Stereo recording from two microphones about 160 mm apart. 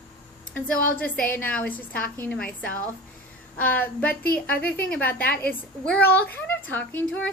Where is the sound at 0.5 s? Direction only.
10° left (ahead or behind).